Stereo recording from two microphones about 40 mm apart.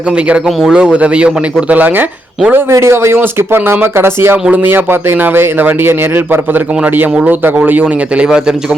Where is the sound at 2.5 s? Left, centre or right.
Right.